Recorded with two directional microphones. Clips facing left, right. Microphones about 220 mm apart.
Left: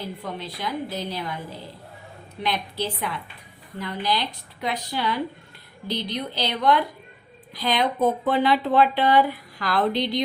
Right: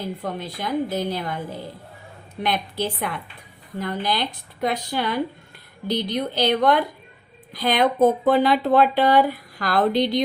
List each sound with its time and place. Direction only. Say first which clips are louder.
0.3 s speech: right 5 dB; 50° right (ahead or behind)
2.4 s speech: right 3 dB; 50° right (ahead or behind)